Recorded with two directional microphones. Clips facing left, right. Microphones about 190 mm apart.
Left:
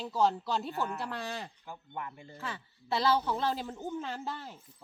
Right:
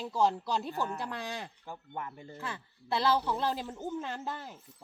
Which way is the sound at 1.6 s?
40° right (ahead or behind).